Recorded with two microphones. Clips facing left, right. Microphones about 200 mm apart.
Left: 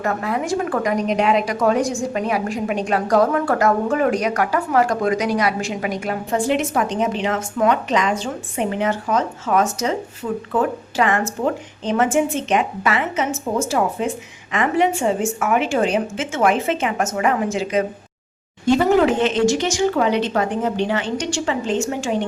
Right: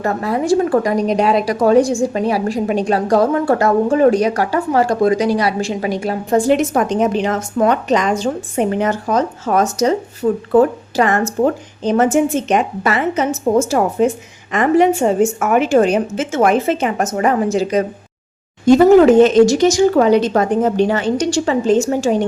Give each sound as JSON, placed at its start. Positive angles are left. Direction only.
{"t": 0.0, "sound": "a woman's voice", "side_deg": -35}